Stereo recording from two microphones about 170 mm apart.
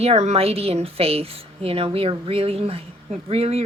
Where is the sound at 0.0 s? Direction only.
40° right (ahead or behind).